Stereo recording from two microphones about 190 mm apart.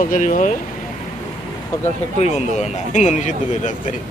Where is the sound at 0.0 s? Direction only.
45° left (ahead or behind).